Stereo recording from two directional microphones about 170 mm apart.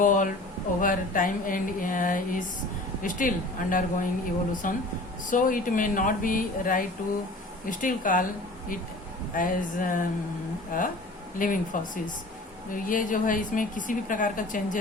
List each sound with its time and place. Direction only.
0.0 s a woman's voice: 50° left (ahead or behind)
9.3 s a woman's voice: 50° left (ahead or behind)